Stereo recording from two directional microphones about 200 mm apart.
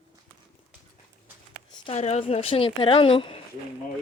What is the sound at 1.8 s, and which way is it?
Speech, 35° left (ahead or behind).